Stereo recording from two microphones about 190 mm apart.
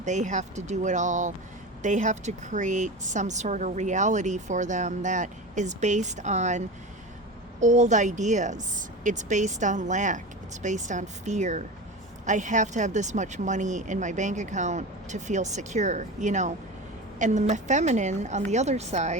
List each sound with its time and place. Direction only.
0.0 s a woman's voice: 40° right (ahead or behind)
7.6 s a woman's voice: 40° right (ahead or behind)